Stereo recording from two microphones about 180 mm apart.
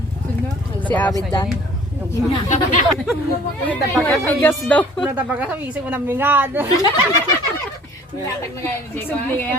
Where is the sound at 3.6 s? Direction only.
10° left (ahead or behind).